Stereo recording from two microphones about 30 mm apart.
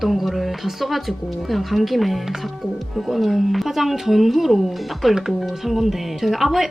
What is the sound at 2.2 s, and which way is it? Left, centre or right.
Speech, centre.